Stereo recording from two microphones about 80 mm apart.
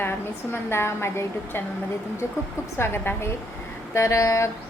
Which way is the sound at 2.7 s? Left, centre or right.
Left.